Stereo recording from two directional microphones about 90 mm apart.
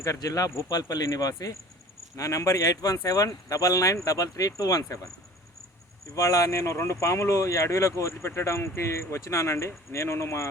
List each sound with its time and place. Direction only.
0.0 s speech: 40° left (ahead or behind)
6.1 s speech: 40° left (ahead or behind)